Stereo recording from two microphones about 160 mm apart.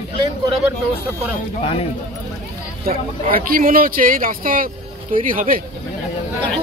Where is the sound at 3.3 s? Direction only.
60° right (ahead or behind).